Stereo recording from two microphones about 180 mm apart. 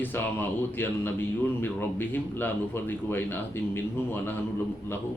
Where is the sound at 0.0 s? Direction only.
10° left (ahead or behind).